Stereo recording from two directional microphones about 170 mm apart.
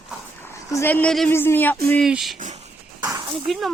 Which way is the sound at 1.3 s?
10° left (ahead or behind).